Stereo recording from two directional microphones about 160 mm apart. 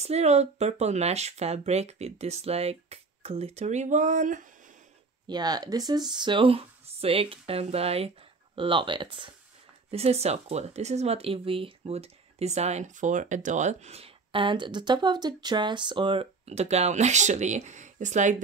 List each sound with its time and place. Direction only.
0.0 s speech: 40° right (ahead or behind)
5.2 s speech: 25° right (ahead or behind); by 18.4 s 50° right (ahead or behind)